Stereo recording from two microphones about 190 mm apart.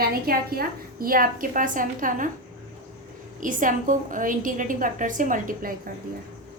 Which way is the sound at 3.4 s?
45° right (ahead or behind).